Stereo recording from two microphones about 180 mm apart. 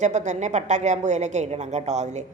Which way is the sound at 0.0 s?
40° right (ahead or behind).